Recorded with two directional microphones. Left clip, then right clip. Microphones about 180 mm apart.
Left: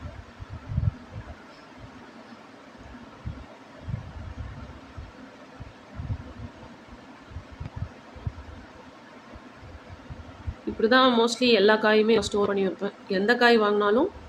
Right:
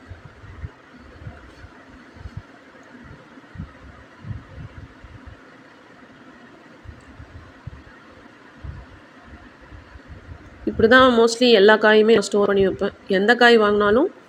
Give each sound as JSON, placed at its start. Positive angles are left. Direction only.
{"t": 10.8, "sound": "speech", "side_deg": -35}